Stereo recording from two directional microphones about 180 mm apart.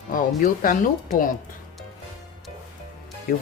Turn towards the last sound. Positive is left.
turn(degrees=55)  # may be behind; listen again after turning